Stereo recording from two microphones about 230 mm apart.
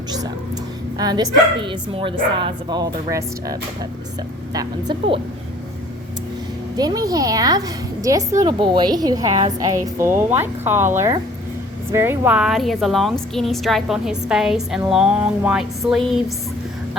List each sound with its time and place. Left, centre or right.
0.9 s a woman's voice: centre
6.7 s a woman's voice: centre